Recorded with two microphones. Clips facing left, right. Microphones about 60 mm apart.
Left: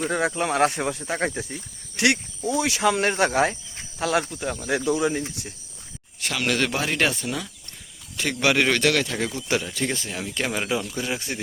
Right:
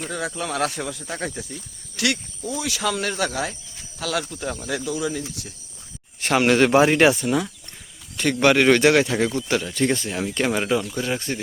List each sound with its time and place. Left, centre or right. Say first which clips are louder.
0.1 s speech: left 2 dB; left
4.3 s speech: even; centre
4.9 s speech: left 5 dB; left
6.1 s speech: right 7 dB; right
7.1 s speech: right 8 dB; centre
8.1 s speech: right 4 dB; centre
9.3 s speech: right 2 dB; centre